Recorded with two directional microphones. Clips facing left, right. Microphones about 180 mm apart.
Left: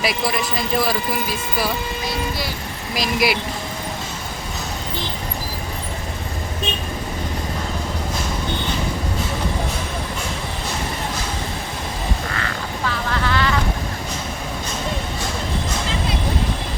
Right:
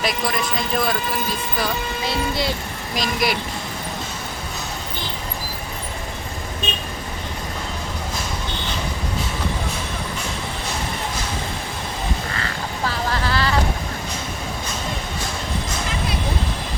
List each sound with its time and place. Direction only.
0.0 s a man's voice: 5° left (ahead or behind)
2.9 s a man's voice: 5° left (ahead or behind)
12.4 s vehicle: 35° right (ahead or behind)